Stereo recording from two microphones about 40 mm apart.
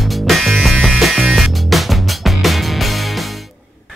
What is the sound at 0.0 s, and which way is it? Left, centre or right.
Music, centre.